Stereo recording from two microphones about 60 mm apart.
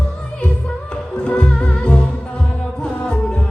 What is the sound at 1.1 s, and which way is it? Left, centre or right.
Music, centre.